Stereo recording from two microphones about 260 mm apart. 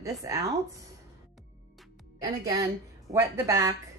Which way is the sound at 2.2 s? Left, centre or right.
Centre.